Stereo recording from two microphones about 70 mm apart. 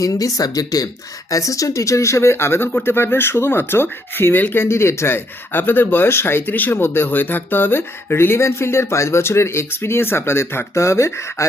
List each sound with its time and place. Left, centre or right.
0.0 s speech: left